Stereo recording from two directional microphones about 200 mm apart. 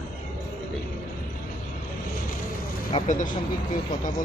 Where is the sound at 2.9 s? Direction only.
40° left (ahead or behind).